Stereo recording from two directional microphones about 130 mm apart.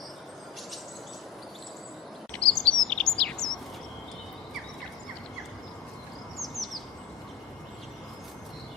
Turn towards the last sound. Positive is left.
turn(degrees=0)  # may be behind; listen again after turning